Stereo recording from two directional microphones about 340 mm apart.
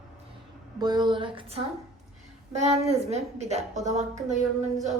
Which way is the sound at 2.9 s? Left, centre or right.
Centre.